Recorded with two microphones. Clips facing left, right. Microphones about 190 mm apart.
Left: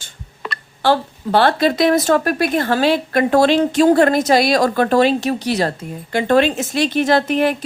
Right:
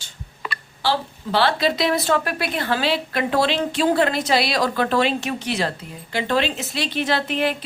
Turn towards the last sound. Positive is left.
turn(degrees=45)  # may be behind; listen again after turning